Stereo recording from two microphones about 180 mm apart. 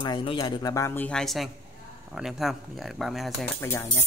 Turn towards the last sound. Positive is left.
turn(degrees=15)  # may be behind; listen again after turning